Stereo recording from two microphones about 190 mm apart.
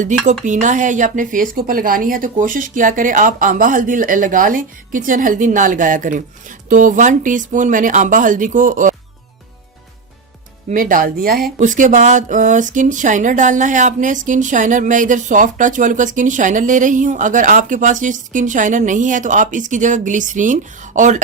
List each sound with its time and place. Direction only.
0.0 s a woman's voice: 40° right (ahead or behind)
10.7 s speech: 45° right (ahead or behind)